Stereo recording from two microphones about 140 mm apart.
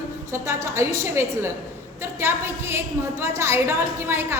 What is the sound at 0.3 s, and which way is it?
A woman's voice, 20° right (ahead or behind).